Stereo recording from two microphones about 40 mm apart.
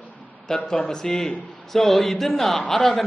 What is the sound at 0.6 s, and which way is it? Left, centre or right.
A man's voice, centre.